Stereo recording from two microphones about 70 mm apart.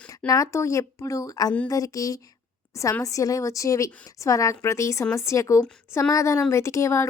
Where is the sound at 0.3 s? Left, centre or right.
Left.